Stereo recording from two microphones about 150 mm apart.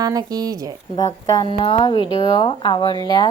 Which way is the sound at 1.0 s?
30° left (ahead or behind).